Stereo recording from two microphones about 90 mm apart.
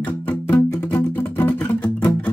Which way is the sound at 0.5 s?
20° left (ahead or behind).